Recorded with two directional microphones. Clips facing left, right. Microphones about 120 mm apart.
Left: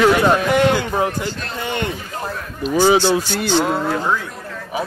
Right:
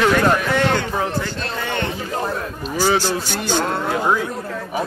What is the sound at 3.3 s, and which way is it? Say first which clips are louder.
Speech: left 3 dB; 50° right (ahead or behind).